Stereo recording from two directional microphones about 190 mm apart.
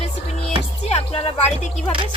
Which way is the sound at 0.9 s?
30° left (ahead or behind).